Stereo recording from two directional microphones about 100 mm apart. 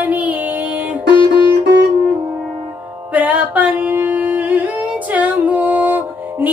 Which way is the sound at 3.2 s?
15° right (ahead or behind).